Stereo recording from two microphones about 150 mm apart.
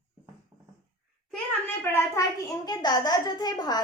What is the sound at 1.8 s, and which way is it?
A child's voice, 15° left (ahead or behind).